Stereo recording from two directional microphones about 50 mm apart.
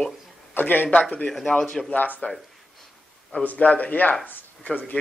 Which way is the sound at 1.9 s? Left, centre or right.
Left.